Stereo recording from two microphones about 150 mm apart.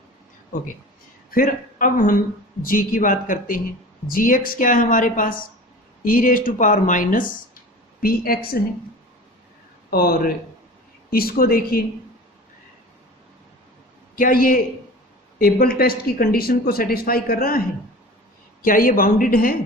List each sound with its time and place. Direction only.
0.5 s speech: 60° left (ahead or behind)
8.0 s speech: 80° left
9.9 s speech: 80° left
14.2 s speech: 70° left (ahead or behind)
18.6 s speech: 70° left (ahead or behind)